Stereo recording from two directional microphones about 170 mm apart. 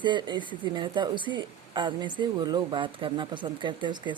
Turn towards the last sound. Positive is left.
turn(degrees=-25)  # may be behind; listen again after turning